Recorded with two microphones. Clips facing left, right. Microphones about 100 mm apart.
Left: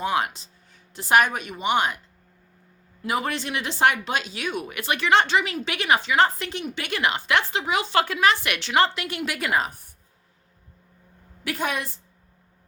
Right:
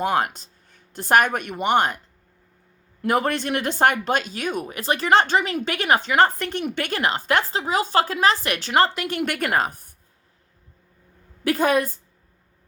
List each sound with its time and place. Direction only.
0.0 s speech: 50° right (ahead or behind)
3.0 s a woman's voice: 55° right (ahead or behind)
4.6 s a woman's voice: 35° right (ahead or behind)
11.4 s a woman's voice: 45° right (ahead or behind)